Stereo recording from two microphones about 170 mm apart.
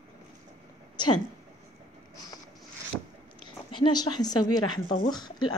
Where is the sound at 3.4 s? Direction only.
25° left (ahead or behind).